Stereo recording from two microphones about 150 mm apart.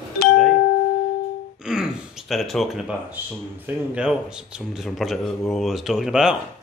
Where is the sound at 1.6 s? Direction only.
5° right (ahead or behind).